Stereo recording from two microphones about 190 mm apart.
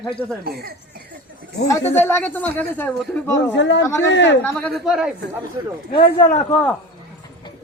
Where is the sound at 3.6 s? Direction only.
70° left (ahead or behind).